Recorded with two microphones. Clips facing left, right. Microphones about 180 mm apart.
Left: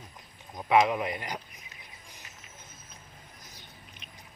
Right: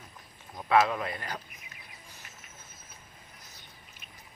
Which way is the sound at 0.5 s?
15° left (ahead or behind).